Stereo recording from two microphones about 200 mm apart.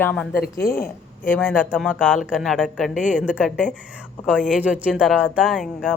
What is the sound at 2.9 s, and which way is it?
Speech, 40° left (ahead or behind).